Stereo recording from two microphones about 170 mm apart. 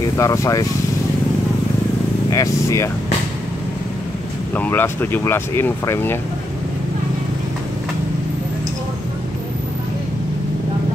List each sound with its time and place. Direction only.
0.0 s speech: 20° left (ahead or behind)
2.2 s speech: 20° left (ahead or behind)
4.6 s speech: 10° left (ahead or behind)